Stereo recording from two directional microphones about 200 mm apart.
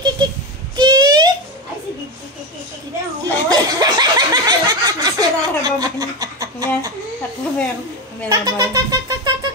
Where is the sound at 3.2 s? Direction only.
20° right (ahead or behind).